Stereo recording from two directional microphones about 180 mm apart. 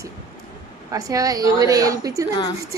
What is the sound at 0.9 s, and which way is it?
A woman's voice, 20° right (ahead or behind).